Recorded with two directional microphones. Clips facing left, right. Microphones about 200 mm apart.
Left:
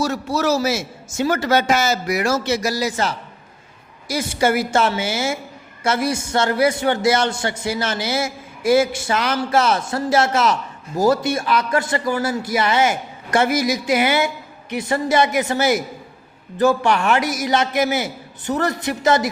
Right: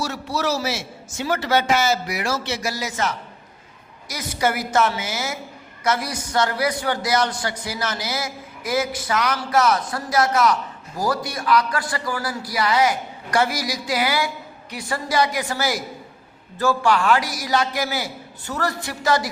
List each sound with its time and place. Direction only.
0.0 s a man's voice: 45° left (ahead or behind); by 19.3 s 20° left (ahead or behind)